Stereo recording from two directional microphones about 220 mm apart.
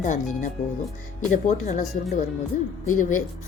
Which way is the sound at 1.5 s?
35° left (ahead or behind).